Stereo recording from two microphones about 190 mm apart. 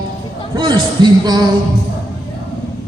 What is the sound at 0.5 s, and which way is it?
Speech, 25° right (ahead or behind).